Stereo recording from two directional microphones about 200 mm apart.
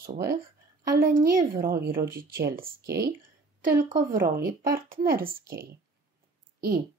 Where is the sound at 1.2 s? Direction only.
50° right (ahead or behind).